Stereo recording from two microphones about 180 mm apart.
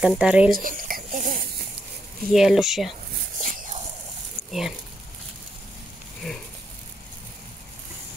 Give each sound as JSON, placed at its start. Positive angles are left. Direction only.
{"t": 0.0, "sound": "speech", "side_deg": -5}
{"t": 0.5, "sound": "a sound", "side_deg": -50}
{"t": 2.2, "sound": "speech", "side_deg": 0}
{"t": 4.5, "sound": "speech", "side_deg": 0}